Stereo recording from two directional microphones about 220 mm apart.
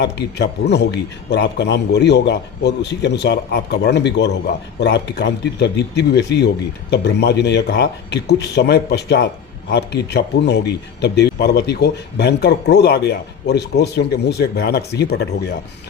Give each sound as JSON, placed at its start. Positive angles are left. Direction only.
{"t": 0.0, "sound": "speech", "side_deg": 50}